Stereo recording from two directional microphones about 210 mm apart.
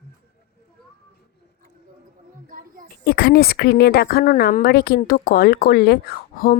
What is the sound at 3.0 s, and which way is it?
A woman's voice, 50° left (ahead or behind).